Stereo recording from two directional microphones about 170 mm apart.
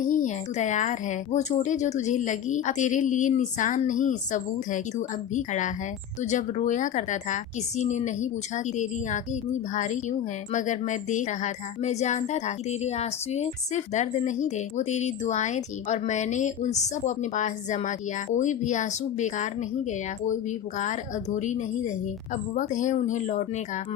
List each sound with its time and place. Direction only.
0.1 s a woman's voice: 45° left (ahead or behind)
20.7 s a woman's voice: 45° left (ahead or behind)